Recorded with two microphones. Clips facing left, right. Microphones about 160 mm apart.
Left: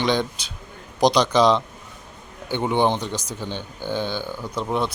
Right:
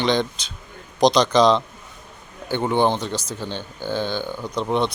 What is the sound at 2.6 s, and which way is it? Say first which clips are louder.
Speech: right 1 dB; 15° left (ahead or behind).